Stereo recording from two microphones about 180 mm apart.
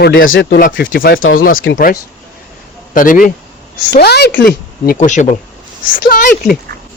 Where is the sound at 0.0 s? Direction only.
75° left (ahead or behind).